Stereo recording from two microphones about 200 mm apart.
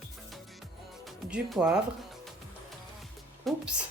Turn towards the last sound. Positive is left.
turn(degrees=0)  # may be behind; listen again after turning